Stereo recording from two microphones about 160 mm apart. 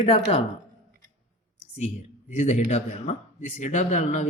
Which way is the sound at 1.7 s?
45° left (ahead or behind).